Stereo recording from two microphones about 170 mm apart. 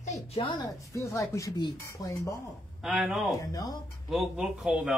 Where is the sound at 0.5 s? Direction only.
20° left (ahead or behind).